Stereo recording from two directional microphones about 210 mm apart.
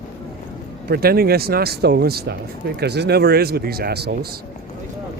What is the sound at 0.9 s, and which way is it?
Speech, 45° right (ahead or behind).